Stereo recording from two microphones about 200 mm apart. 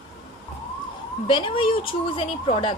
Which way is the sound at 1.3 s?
25° left (ahead or behind).